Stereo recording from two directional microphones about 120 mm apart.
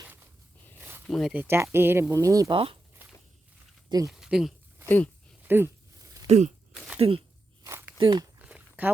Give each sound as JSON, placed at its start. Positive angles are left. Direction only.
{"t": 0.0, "sound": "zipper", "side_deg": -20}
{"t": 0.8, "sound": "a sound", "side_deg": -20}
{"t": 1.0, "sound": "speech", "side_deg": 5}
{"t": 1.3, "sound": "speech", "side_deg": -15}
{"t": 2.5, "sound": "speech", "side_deg": -50}
{"t": 3.0, "sound": "walk", "side_deg": -15}
{"t": 4.0, "sound": "speech", "side_deg": -5}
{"t": 4.9, "sound": "speech", "side_deg": 15}
{"t": 5.4, "sound": "a sound", "side_deg": -15}
{"t": 6.2, "sound": "a sound", "side_deg": -65}
{"t": 7.0, "sound": "speech", "side_deg": -50}
{"t": 7.6, "sound": "walk", "side_deg": -20}
{"t": 7.9, "sound": "speech", "side_deg": -40}
{"t": 8.4, "sound": "a sound", "side_deg": -10}